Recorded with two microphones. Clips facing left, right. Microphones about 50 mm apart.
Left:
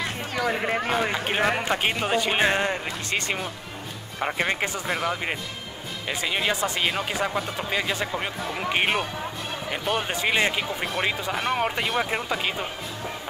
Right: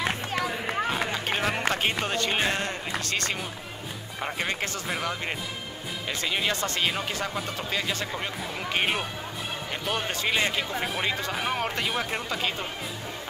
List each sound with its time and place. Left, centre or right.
0.9 s speech: centre
6.0 s speech: centre